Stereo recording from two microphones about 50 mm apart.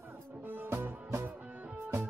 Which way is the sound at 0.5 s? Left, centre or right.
Right.